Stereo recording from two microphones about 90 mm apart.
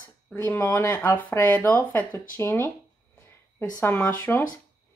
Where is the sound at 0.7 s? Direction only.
35° left (ahead or behind).